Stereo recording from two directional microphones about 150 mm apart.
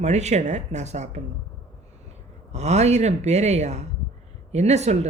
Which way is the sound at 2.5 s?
50° right (ahead or behind).